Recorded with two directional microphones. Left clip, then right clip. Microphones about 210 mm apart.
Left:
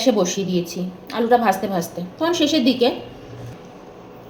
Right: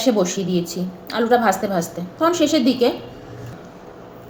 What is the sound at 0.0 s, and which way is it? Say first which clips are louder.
A woman's voice: even; centre (ahead or behind).